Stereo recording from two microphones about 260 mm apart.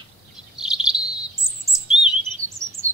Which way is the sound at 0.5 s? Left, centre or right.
Centre.